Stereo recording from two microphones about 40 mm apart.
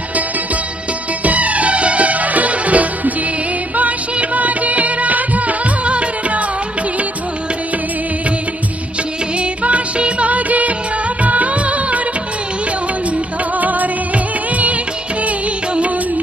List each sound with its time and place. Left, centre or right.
1.2 s music: right
3.7 s music of bollywood: right
9.4 s music: right
11.2 s music of bollywood: right
13.6 s music: right